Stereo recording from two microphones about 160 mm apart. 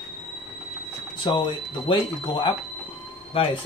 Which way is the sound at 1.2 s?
30° left (ahead or behind).